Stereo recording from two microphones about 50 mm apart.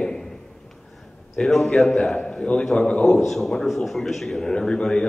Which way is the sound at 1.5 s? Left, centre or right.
Centre.